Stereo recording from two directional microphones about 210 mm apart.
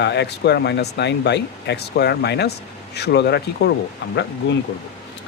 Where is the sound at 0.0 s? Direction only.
55° left (ahead or behind).